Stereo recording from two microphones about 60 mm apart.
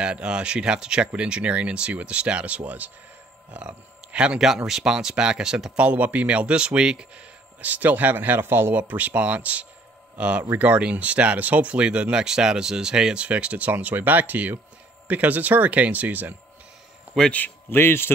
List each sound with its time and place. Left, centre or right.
0.0 s speech: centre
7.6 s speech: right
8.7 s speech: right
17.3 s a man's voice: left
17.7 s speech: left